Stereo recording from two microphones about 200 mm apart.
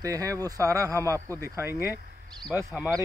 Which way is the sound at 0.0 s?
15° right (ahead or behind).